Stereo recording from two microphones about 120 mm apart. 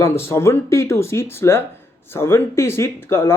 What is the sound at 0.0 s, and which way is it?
Speech, 20° left (ahead or behind).